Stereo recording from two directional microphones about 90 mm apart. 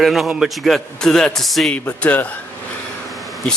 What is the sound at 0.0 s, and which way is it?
Speech, centre (ahead or behind).